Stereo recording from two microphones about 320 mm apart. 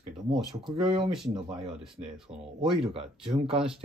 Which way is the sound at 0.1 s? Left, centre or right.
Centre.